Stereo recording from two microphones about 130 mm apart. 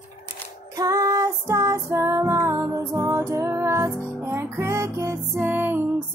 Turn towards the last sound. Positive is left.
turn(degrees=-15)  # may be behind; listen again after turning